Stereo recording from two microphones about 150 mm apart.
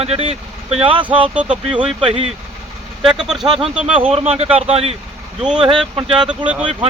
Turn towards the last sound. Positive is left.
turn(degrees=-10)  # may be behind; listen again after turning